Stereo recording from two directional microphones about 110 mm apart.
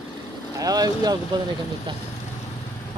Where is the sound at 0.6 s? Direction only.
35° right (ahead or behind).